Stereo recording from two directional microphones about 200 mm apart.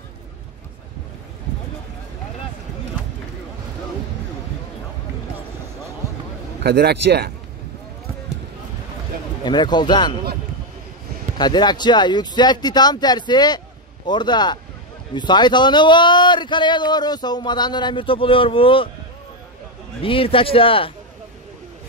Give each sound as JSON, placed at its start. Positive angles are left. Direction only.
{"t": 6.6, "sound": "a man's voice", "side_deg": -55}
{"t": 9.4, "sound": "a man's voice", "side_deg": 20}
{"t": 11.3, "sound": "a man's voice", "side_deg": 20}
{"t": 20.0, "sound": "a man's voice", "side_deg": 25}